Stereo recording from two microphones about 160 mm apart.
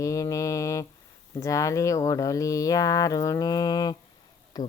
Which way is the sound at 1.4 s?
20° left (ahead or behind).